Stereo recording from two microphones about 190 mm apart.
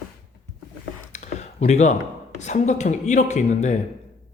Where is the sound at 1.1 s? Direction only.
35° left (ahead or behind).